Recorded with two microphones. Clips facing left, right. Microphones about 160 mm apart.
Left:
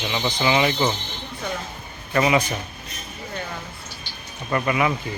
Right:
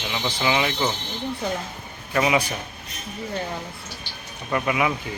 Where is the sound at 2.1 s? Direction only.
5° right (ahead or behind).